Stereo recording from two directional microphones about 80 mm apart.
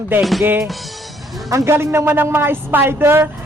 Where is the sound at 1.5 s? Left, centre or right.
Right.